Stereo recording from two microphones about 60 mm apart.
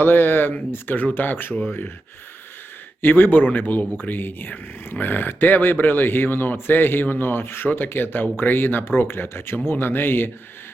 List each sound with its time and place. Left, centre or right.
0.0 s speech: left
3.0 s speech: left